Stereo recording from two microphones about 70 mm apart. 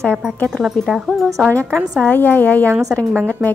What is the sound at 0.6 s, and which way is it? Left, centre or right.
Speech, centre.